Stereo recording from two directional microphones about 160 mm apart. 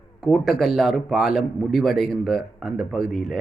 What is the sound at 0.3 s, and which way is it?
A man's voice, centre (ahead or behind).